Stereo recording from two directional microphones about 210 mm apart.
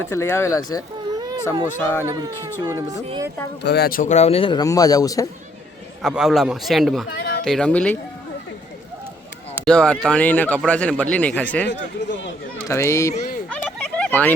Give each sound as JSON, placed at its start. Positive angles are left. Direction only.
{"t": 0.1, "sound": "speech", "side_deg": 10}
{"t": 1.1, "sound": "a sound", "side_deg": -20}
{"t": 1.8, "sound": "speech", "side_deg": 10}
{"t": 2.0, "sound": "speech", "side_deg": -15}
{"t": 3.6, "sound": "speech", "side_deg": 50}
{"t": 6.0, "sound": "a man's voice", "side_deg": 0}
{"t": 7.2, "sound": "a sound", "side_deg": 55}
{"t": 7.4, "sound": "a man's voice", "side_deg": 5}
{"t": 9.6, "sound": "speech", "side_deg": 5}
{"t": 13.5, "sound": "a sound", "side_deg": 5}